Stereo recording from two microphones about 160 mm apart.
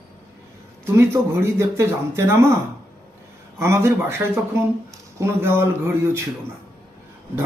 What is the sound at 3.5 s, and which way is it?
A man's voice, 15° right (ahead or behind).